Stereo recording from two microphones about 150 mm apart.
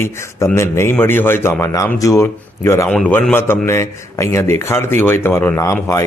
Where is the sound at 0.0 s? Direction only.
20° left (ahead or behind).